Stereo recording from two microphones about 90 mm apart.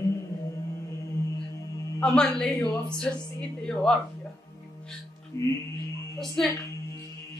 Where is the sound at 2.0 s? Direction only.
5° left (ahead or behind).